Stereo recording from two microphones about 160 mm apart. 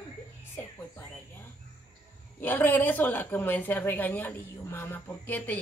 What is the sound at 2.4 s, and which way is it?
A woman's voice, 10° left (ahead or behind).